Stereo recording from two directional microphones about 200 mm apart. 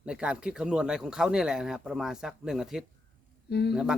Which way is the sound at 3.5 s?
55° left (ahead or behind).